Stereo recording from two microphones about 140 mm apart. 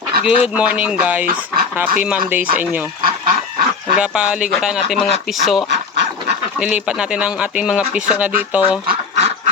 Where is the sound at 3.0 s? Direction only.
90° right.